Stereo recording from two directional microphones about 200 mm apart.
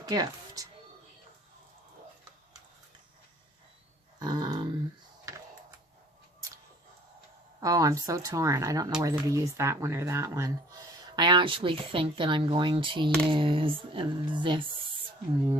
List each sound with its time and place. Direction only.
0.0 s music: 20° right (ahead or behind)
4.2 s dog: 20° right (ahead or behind)
5.3 s computer keyboard: 15° right (ahead or behind)
7.6 s speech: 15° right (ahead or behind)